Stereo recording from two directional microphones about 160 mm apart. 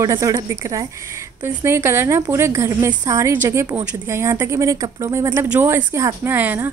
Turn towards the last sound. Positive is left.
turn(degrees=-10)  # may be behind; listen again after turning